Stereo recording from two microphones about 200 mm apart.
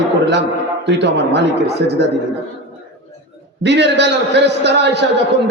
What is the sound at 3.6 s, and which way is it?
A man's voice, 60° right (ahead or behind).